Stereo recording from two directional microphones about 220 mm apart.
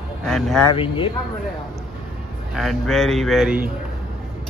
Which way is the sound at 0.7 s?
25° left (ahead or behind).